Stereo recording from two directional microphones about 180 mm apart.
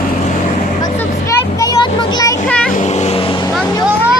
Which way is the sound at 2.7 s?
40° left (ahead or behind).